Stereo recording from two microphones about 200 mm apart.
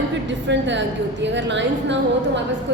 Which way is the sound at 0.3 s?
65° right (ahead or behind).